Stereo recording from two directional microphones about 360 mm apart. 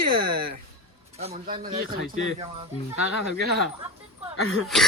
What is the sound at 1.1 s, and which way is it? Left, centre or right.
Speech, centre.